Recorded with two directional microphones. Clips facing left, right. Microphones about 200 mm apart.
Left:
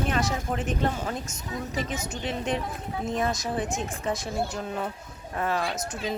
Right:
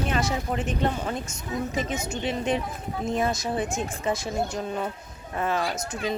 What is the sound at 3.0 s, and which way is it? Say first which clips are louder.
Speech: right 2 dB; centre (ahead or behind).